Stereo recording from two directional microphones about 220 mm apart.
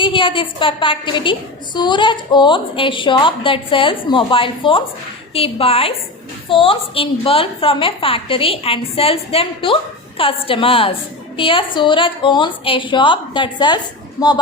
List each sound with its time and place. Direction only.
0.0 s a woman's voice: 25° left (ahead or behind)